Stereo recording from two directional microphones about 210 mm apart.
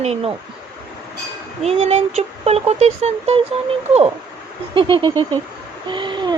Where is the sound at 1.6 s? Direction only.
30° right (ahead or behind).